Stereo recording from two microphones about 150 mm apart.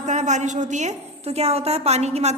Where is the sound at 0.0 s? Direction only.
50° right (ahead or behind).